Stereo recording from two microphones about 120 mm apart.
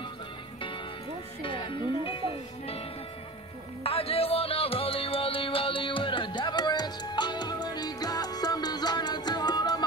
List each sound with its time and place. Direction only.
1.4 s speech: 45° left (ahead or behind)
3.8 s music: 55° left (ahead or behind); by 9.8 s 35° left (ahead or behind)